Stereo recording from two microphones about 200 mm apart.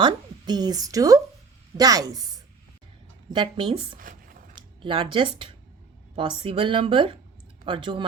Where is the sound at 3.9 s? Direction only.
45° right (ahead or behind).